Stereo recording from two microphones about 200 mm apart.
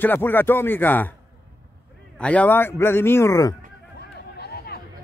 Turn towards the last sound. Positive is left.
turn(degrees=50)  # may be behind; listen again after turning